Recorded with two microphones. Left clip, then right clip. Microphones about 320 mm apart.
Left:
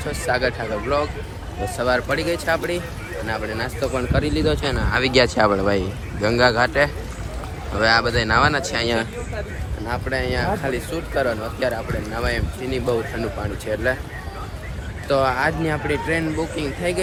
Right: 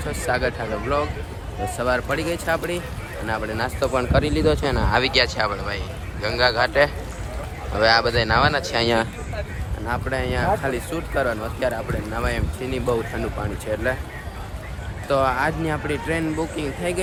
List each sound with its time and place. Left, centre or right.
0.1 s speech: centre
3.9 s speech: right; by 8.9 s centre
8.9 s speech: right
9.8 s speech: centre
15.0 s speech: centre